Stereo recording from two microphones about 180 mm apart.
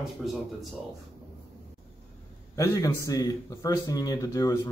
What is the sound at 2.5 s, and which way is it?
A man's voice, 20° left (ahead or behind).